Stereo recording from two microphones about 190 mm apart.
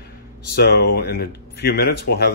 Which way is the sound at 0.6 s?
60° left (ahead or behind).